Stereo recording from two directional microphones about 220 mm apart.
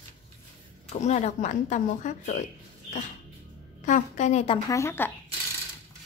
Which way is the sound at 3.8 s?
35° left (ahead or behind).